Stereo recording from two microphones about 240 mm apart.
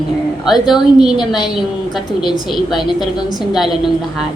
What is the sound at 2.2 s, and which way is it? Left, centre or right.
Speech, centre.